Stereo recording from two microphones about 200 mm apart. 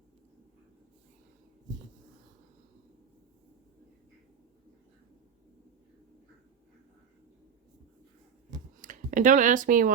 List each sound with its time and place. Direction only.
8.8 s speech: 40° right (ahead or behind)